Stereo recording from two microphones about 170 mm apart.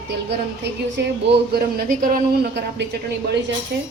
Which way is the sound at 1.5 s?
60° right (ahead or behind).